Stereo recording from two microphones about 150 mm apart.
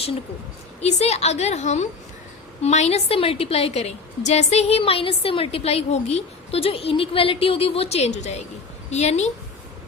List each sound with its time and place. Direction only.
0.8 s a woman's voice: 45° left (ahead or behind)